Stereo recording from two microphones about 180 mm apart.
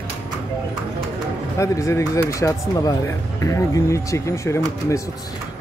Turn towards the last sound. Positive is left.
turn(degrees=15)  # may be behind; listen again after turning